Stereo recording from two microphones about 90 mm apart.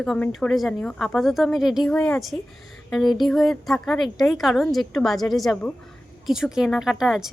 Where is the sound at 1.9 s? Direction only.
15° left (ahead or behind).